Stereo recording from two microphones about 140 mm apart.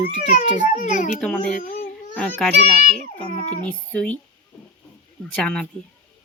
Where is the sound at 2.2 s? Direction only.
10° left (ahead or behind).